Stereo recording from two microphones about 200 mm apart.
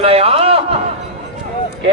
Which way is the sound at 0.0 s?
30° right (ahead or behind).